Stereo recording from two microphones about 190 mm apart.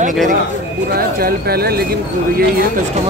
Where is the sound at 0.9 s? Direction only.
55° right (ahead or behind).